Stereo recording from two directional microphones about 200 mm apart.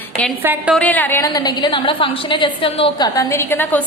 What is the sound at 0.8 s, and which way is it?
A woman's voice, 10° left (ahead or behind).